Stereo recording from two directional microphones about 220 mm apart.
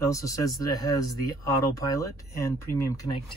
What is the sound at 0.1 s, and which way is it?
Speech, 15° left (ahead or behind).